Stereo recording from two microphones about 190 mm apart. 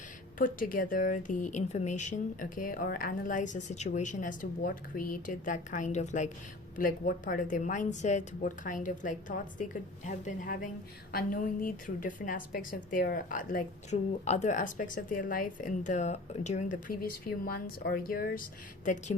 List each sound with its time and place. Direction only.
0.3 s a woman's voice: 45° left (ahead or behind)